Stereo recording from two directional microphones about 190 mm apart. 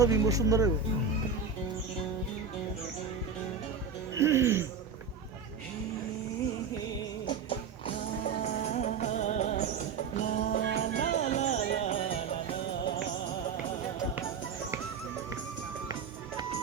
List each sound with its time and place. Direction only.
0.0 s speech: 15° right (ahead or behind)
4.2 s speech: 15° right (ahead or behind)
8.2 s music: 40° left (ahead or behind)